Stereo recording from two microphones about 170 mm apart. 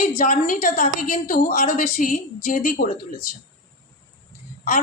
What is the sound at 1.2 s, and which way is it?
Speech, 60° left (ahead or behind).